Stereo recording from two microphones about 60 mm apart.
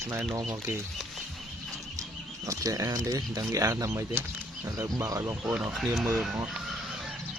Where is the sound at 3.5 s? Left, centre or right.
Right.